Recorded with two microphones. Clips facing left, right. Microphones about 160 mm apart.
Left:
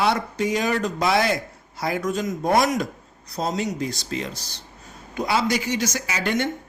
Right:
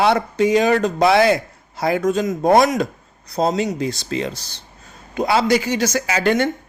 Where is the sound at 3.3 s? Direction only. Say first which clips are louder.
Right 6 dB; 30° right (ahead or behind).